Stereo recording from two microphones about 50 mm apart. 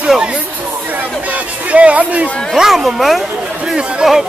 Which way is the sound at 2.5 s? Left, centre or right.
Centre.